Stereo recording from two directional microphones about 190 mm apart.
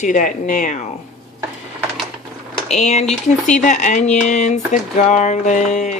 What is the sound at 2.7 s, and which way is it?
Speech, 35° left (ahead or behind).